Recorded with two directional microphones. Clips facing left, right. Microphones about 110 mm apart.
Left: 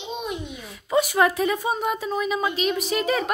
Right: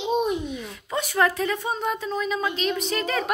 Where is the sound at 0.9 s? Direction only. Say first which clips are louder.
Left 3 dB; 10° left (ahead or behind).